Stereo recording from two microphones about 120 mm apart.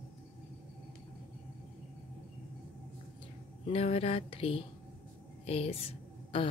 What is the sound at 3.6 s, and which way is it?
Speech, 55° left (ahead or behind).